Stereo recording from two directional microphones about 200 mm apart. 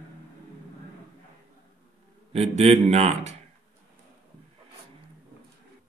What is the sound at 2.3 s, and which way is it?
Speech, 30° right (ahead or behind).